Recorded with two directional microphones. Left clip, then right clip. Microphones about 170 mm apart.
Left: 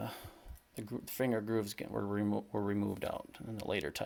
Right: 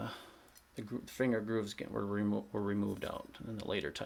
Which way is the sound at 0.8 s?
50° left (ahead or behind).